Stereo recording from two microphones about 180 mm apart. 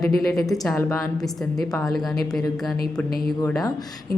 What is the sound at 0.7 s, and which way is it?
Speech, 15° left (ahead or behind).